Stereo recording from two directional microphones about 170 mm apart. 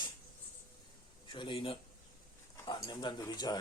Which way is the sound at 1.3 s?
30° left (ahead or behind).